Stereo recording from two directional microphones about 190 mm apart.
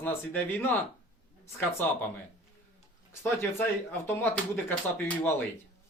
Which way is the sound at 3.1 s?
15° left (ahead or behind).